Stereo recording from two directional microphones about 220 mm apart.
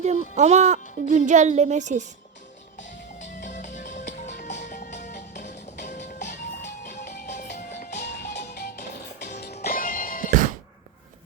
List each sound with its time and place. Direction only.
0.0 s speech: 30° right (ahead or behind)
3.4 s music: 35° left (ahead or behind)
7.9 s music: 50° left (ahead or behind)
9.2 s music: 35° left (ahead or behind)